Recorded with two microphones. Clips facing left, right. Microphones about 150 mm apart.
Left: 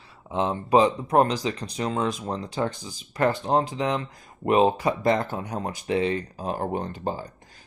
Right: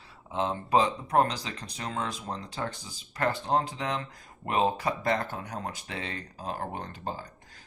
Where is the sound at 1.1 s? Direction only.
15° left (ahead or behind).